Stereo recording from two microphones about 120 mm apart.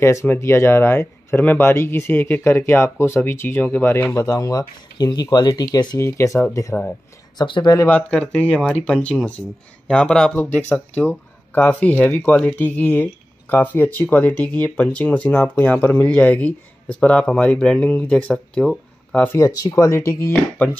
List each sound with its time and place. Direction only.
0.0 s speech: 25° left (ahead or behind)
5.9 s speech: 25° left (ahead or behind)
7.3 s speech: 40° left (ahead or behind)
7.9 s speech: 10° left (ahead or behind)
19.2 s speech: 25° left (ahead or behind)